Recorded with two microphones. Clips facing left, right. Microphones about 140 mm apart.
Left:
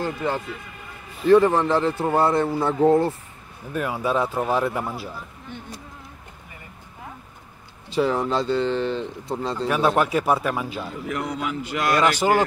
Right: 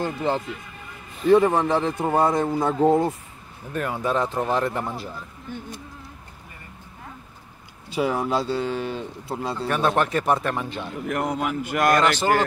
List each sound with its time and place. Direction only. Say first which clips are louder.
1.3 s a man's voice: left 1 dB; 10° right (ahead or behind)
3.7 s speech: left 1 dB; 5° left (ahead or behind)
5.5 s speech: right 4 dB; 40° right (ahead or behind)
7.9 s a man's voice: left 1 dB; 10° right (ahead or behind)
9.7 s speech: left 2 dB; 10° left (ahead or behind)
11.1 s a man's voice: right 3 dB; 50° right (ahead or behind)
12.0 s speech: left 1 dB; 10° left (ahead or behind)